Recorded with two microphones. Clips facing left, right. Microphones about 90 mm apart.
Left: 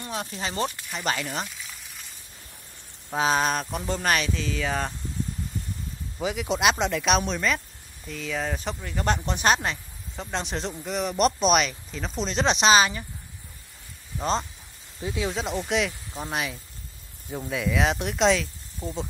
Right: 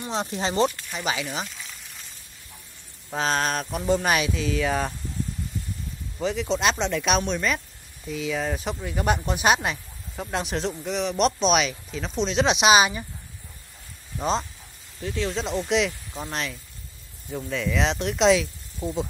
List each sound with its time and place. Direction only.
0.1 s speech: 30° right (ahead or behind)
0.8 s speech: centre (ahead or behind)
3.1 s speech: 5° left (ahead or behind)
6.1 s speech: 5° left (ahead or behind); by 13.0 s 15° right (ahead or behind)
14.1 s speech: centre (ahead or behind)
15.0 s speech: 15° left (ahead or behind)